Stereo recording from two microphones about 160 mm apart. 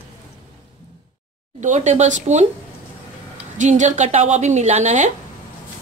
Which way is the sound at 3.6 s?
50° right (ahead or behind).